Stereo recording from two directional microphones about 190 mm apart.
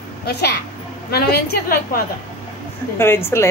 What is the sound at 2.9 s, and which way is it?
Speech, 10° left (ahead or behind).